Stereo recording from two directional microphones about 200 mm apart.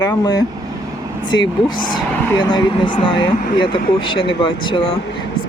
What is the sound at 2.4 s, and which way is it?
Speech, 20° left (ahead or behind).